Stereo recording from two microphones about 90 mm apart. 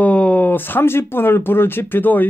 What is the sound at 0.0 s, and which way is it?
Speech, 15° left (ahead or behind).